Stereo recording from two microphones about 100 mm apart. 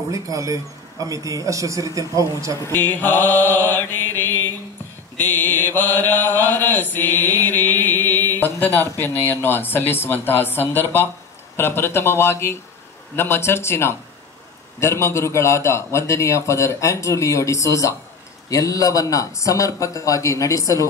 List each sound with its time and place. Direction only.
0.1 s a man's voice: 35° right (ahead or behind)
2.7 s mantra: 20° left (ahead or behind)
18.5 s speech: 35° left (ahead or behind)